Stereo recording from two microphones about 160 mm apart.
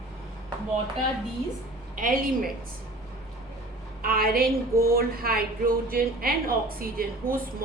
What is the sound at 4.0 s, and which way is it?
A woman's voice, 65° right (ahead or behind).